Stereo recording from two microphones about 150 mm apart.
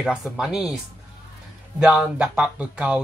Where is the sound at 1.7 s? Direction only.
5° right (ahead or behind).